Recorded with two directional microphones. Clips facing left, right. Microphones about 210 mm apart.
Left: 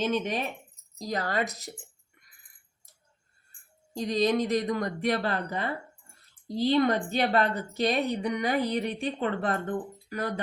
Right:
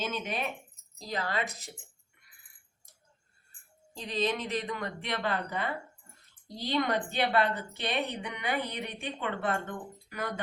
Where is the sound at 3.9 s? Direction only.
40° left (ahead or behind).